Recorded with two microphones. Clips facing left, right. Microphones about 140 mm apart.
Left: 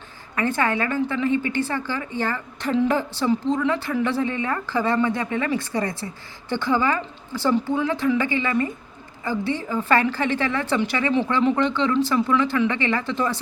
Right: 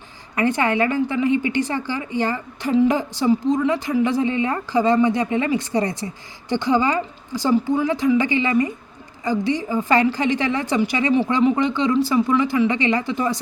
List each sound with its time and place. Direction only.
0.3 s speech: 15° right (ahead or behind)